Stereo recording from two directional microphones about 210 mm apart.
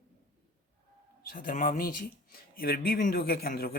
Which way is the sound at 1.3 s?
40° left (ahead or behind).